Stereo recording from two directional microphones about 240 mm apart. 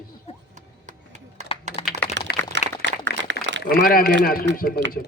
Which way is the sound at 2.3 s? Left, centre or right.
Left.